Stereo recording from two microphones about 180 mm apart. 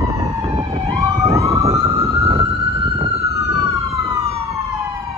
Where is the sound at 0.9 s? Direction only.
20° right (ahead or behind).